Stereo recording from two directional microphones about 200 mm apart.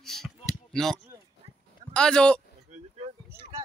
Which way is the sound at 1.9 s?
5° left (ahead or behind).